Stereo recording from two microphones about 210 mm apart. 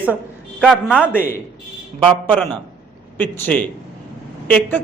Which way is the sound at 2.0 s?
20° right (ahead or behind).